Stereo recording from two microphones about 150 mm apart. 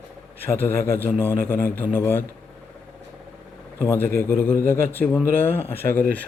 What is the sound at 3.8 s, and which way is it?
A man's voice, 15° left (ahead or behind).